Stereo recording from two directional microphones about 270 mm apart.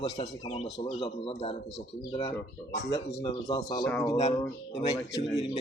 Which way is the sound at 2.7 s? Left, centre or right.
Left.